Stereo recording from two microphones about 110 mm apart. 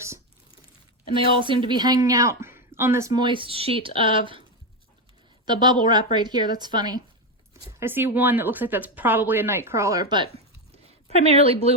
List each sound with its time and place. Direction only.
1.1 s a woman's voice: 50° right (ahead or behind); by 3.1 s 25° right (ahead or behind)
3.1 s speech: 45° right (ahead or behind)
5.5 s a woman's voice: 40° right (ahead or behind)
7.8 s speech: 20° right (ahead or behind); by 10.2 s 40° right (ahead or behind)
11.1 s a woman's voice: 65° right (ahead or behind)